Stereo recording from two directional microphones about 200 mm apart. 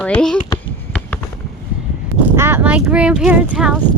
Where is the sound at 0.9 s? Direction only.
5° left (ahead or behind).